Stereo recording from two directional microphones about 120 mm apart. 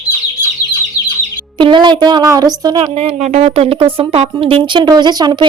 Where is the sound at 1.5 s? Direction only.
40° right (ahead or behind).